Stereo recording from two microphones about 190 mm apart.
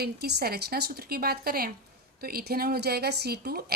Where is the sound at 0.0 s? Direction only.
60° right (ahead or behind).